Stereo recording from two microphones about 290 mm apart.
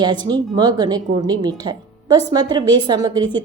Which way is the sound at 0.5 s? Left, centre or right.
Centre.